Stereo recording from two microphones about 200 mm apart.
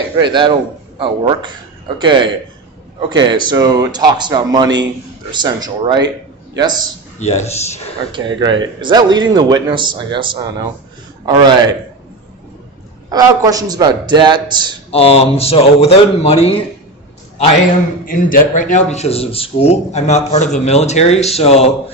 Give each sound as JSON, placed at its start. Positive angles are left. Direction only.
{"t": 0.2, "sound": "a man's voice", "side_deg": -25}
{"t": 7.2, "sound": "speech", "side_deg": 35}
{"t": 8.1, "sound": "a man's voice", "side_deg": -20}
{"t": 13.1, "sound": "a man's voice", "side_deg": -20}
{"t": 14.8, "sound": "speech", "side_deg": 30}
{"t": 18.0, "sound": "speech", "side_deg": 45}